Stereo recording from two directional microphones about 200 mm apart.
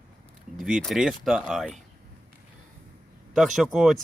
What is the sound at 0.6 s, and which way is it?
Speech, centre (ahead or behind).